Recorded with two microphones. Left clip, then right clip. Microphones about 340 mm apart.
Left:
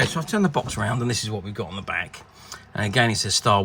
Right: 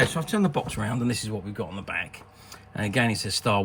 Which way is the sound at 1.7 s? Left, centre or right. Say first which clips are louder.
Left 5 dB; left.